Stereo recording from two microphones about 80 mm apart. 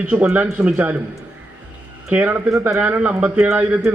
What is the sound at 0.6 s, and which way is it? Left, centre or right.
Speech, right.